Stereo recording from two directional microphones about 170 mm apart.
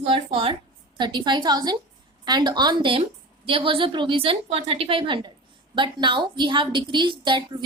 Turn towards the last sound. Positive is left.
turn(degrees=-25)  # may be behind; listen again after turning